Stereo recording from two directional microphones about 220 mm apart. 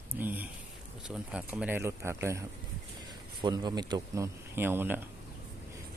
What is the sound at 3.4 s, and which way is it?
Speech, 20° right (ahead or behind).